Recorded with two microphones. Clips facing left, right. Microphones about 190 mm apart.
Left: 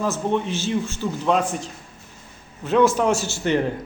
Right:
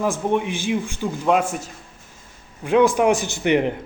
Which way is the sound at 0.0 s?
15° right (ahead or behind).